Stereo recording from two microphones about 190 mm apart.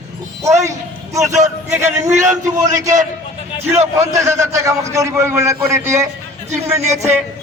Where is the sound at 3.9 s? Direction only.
15° right (ahead or behind).